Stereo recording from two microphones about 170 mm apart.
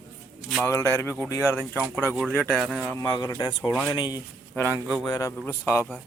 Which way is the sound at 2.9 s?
20° left (ahead or behind).